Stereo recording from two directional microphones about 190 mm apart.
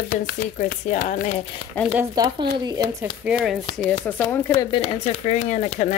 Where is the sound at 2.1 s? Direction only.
25° right (ahead or behind).